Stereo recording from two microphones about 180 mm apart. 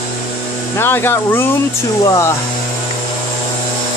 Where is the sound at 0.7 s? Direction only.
15° left (ahead or behind).